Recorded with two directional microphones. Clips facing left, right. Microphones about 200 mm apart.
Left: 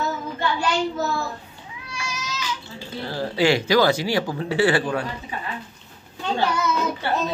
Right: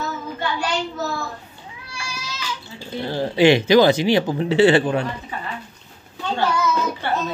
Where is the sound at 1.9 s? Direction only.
30° right (ahead or behind).